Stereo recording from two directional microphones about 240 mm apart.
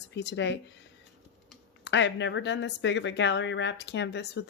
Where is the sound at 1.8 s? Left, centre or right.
Left.